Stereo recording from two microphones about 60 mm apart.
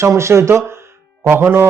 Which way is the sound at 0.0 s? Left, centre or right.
Right.